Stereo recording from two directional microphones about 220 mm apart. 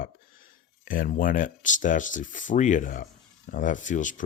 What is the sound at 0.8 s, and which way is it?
Speech, 40° left (ahead or behind).